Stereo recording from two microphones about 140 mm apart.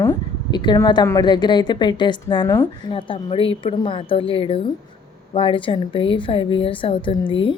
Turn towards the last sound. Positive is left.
turn(degrees=40)  # may be behind; listen again after turning